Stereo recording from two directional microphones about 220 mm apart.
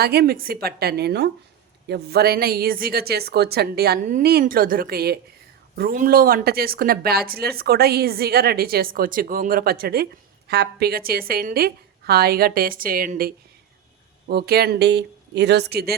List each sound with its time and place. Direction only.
0.0 s speech: 45° right (ahead or behind)